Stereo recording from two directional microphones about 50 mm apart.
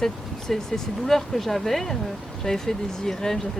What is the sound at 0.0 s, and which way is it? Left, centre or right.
Speech, centre.